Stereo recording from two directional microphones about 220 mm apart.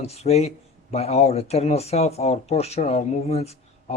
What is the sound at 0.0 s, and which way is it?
Speech, 30° left (ahead or behind).